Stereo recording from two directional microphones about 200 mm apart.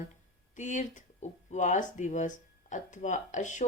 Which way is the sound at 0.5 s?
40° left (ahead or behind).